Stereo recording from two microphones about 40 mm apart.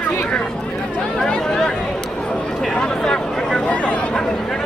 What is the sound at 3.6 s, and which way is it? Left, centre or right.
Speech, left.